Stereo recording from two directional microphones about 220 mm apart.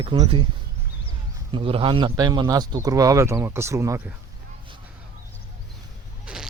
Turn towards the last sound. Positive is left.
turn(degrees=-5)  # may be behind; listen again after turning